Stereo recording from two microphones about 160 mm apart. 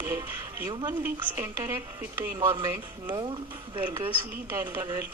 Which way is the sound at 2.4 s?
30° right (ahead or behind).